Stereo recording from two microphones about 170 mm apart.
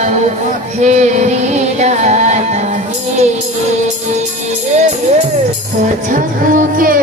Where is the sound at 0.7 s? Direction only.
45° right (ahead or behind).